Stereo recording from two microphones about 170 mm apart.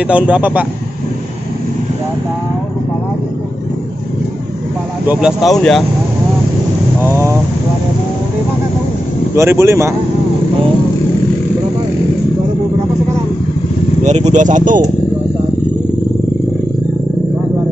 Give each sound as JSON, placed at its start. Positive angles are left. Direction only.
{"t": 0.0, "sound": "speech", "side_deg": -5}
{"t": 5.0, "sound": "speech", "side_deg": -5}
{"t": 7.0, "sound": "vehicle", "side_deg": -15}
{"t": 9.3, "sound": "speech", "side_deg": -15}
{"t": 14.0, "sound": "speech", "side_deg": -45}